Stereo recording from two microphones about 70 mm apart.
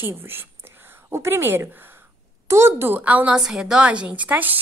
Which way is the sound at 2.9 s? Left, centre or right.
Right.